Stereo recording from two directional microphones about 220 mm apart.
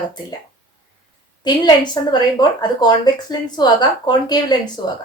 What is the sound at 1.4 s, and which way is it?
Speech, 20° left (ahead or behind).